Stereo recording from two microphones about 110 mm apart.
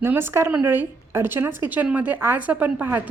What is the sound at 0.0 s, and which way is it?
A woman's voice, 20° right (ahead or behind).